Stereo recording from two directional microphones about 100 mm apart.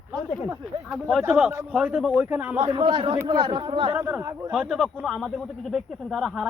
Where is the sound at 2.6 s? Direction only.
40° right (ahead or behind).